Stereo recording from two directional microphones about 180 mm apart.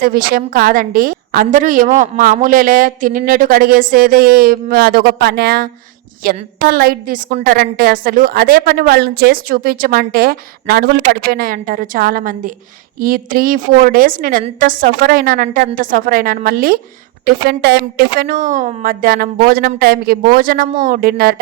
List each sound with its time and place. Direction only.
0.0 s a woman's voice: 55° right (ahead or behind)
17.2 s speech: 65° right (ahead or behind)
18.3 s a woman's voice: 45° right (ahead or behind)